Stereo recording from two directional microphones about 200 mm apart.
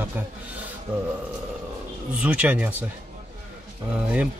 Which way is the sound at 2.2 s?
5° right (ahead or behind).